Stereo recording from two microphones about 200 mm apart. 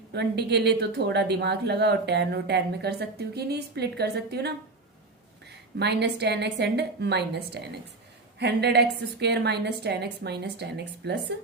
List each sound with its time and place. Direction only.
0.1 s speech: 55° right (ahead or behind)
5.7 s speech: 55° right (ahead or behind)